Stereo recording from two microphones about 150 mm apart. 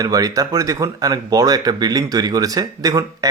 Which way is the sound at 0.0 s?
25° right (ahead or behind).